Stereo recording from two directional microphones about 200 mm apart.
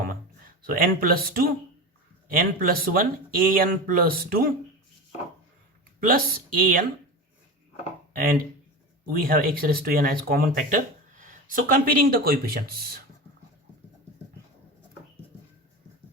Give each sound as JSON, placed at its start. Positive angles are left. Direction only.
{"t": 0.6, "sound": "speech", "side_deg": -45}
{"t": 6.0, "sound": "speech", "side_deg": -45}
{"t": 8.1, "sound": "speech", "side_deg": -45}